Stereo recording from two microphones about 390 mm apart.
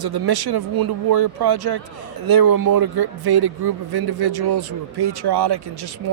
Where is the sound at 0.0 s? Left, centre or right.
Right.